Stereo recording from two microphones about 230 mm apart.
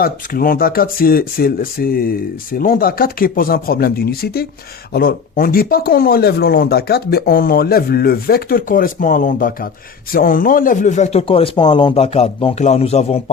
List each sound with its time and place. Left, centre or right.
0.0 s speech: left